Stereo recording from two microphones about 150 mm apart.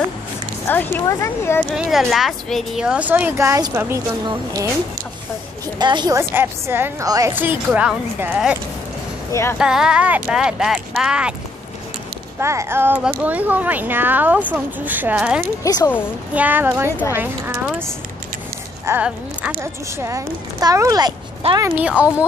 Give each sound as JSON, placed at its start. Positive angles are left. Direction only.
{"t": 0.7, "sound": "speech", "side_deg": 15}
{"t": 1.7, "sound": "speech", "side_deg": 0}
{"t": 5.8, "sound": "a woman's voice", "side_deg": -30}
{"t": 6.1, "sound": "speech", "side_deg": -15}
{"t": 9.3, "sound": "speech", "side_deg": 15}
{"t": 9.6, "sound": "speech", "side_deg": -5}
{"t": 12.4, "sound": "speech", "side_deg": -20}
{"t": 15.6, "sound": "speech", "side_deg": 20}
{"t": 16.3, "sound": "speech", "side_deg": -10}
{"t": 18.9, "sound": "a woman's voice", "side_deg": -10}
{"t": 21.4, "sound": "speech", "side_deg": -40}
{"t": 21.8, "sound": "speech", "side_deg": -10}